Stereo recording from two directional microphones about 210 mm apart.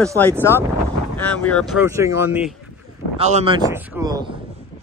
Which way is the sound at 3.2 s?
30° right (ahead or behind).